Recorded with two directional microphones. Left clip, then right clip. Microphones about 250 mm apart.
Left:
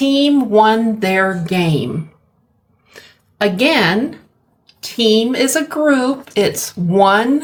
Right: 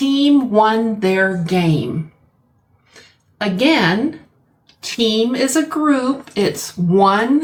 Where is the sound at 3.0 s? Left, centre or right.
Left.